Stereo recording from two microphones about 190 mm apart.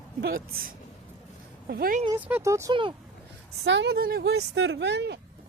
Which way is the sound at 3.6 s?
65° right (ahead or behind).